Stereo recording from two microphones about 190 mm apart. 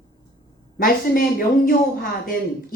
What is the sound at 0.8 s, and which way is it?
Speech, 50° left (ahead or behind).